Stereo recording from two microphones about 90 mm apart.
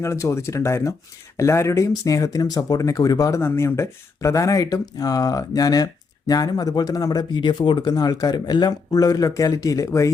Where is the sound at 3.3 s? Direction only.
30° left (ahead or behind); by 7.3 s 45° left (ahead or behind).